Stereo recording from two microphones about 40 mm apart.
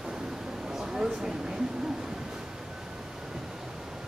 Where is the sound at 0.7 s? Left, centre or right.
Centre.